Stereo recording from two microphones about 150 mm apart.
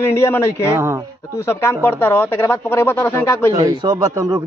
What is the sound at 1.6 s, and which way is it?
Speech, 15° left (ahead or behind).